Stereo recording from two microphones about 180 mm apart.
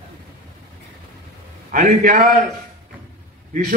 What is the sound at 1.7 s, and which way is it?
Speech, 50° right (ahead or behind).